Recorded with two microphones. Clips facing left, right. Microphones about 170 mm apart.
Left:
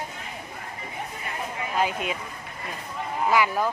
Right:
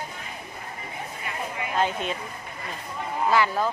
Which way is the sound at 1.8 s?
10° left (ahead or behind).